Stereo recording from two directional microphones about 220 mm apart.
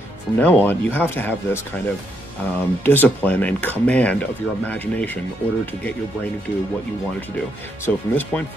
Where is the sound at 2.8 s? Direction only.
10° left (ahead or behind).